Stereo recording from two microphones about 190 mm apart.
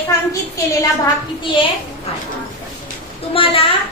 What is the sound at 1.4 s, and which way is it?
Speech, 25° left (ahead or behind).